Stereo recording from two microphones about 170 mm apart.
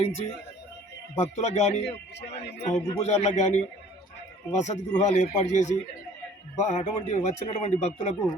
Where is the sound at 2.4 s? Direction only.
90° left.